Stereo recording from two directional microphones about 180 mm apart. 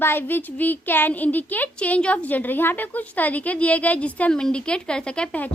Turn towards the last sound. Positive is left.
turn(degrees=10)  # may be behind; listen again after turning